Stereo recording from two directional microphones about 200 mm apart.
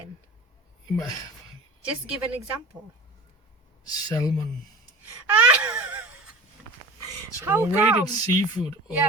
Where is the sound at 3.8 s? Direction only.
15° left (ahead or behind).